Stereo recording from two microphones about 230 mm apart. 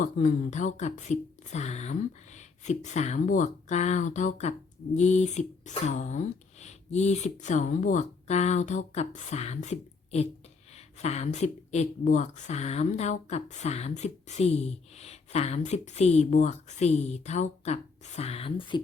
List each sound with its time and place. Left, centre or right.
0.0 s a woman's voice: left